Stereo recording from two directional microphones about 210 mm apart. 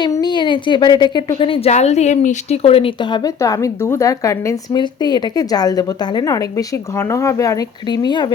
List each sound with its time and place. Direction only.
0.0 s speech: 20° left (ahead or behind)